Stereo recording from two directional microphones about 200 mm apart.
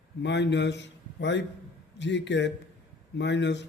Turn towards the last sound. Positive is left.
turn(degrees=60)  # may be behind; listen again after turning